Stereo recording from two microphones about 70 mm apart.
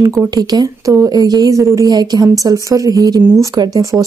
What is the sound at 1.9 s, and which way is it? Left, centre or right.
Speech, right.